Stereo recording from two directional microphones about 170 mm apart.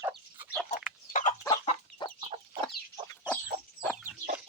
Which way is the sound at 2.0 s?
25° left (ahead or behind).